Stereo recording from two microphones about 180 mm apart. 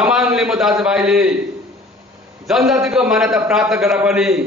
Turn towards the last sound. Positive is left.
turn(degrees=-5)  # may be behind; listen again after turning